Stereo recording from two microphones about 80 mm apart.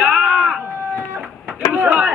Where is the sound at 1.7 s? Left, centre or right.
Centre.